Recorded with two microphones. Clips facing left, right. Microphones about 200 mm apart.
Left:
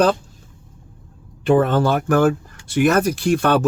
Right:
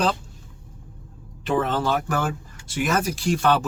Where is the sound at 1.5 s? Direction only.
50° left (ahead or behind).